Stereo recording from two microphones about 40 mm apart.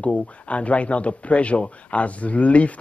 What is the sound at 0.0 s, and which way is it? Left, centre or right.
Speech, left.